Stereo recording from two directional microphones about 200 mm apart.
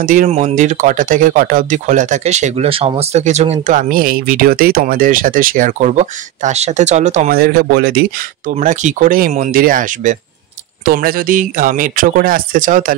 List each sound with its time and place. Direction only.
0.0 s speech: 45° right (ahead or behind)